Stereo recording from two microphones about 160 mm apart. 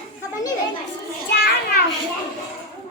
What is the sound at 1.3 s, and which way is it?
Children playing, 90° left.